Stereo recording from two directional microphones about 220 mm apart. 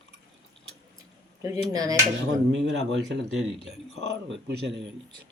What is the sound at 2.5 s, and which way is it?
Speech, 55° right (ahead or behind).